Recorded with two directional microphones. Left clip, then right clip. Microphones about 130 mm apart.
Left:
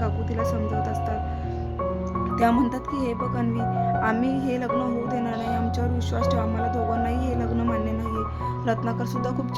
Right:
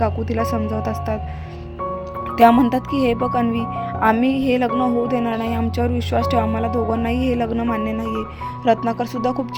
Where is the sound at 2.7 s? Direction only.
45° right (ahead or behind).